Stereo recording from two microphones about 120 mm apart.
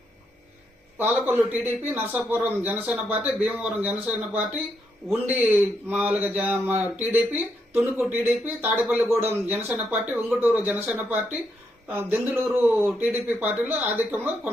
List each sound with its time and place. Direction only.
0.9 s a man's voice: 15° right (ahead or behind)
12.3 s a man's voice: 15° right (ahead or behind)